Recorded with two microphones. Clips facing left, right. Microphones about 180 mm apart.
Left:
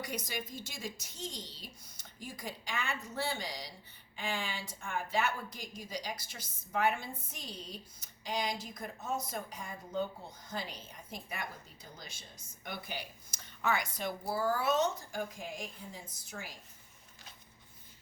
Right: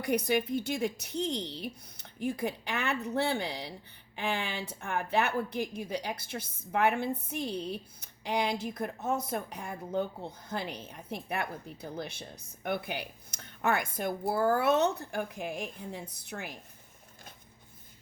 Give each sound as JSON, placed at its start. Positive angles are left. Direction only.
{"t": 0.0, "sound": "speech", "side_deg": -60}